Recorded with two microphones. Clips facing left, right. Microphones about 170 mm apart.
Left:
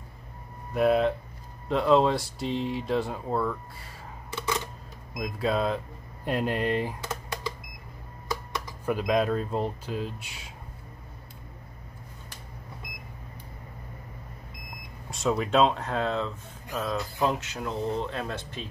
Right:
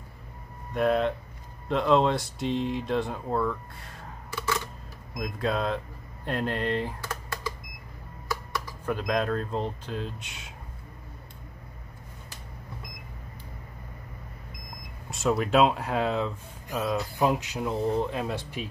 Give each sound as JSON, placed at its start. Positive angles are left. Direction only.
{"t": 0.7, "sound": "speech", "side_deg": 5}
{"t": 4.3, "sound": "a sound", "side_deg": 20}
{"t": 5.2, "sound": "speech", "side_deg": 0}
{"t": 6.2, "sound": "a sound", "side_deg": 10}
{"t": 8.3, "sound": "computer keyboard", "side_deg": 20}
{"t": 8.9, "sound": "speech", "side_deg": 10}
{"t": 15.0, "sound": "speech", "side_deg": 0}